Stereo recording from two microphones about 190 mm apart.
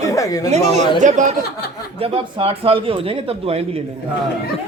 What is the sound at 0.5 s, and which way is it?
Speech, 35° right (ahead or behind).